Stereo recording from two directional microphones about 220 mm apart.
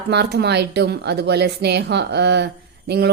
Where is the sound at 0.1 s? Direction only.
50° right (ahead or behind).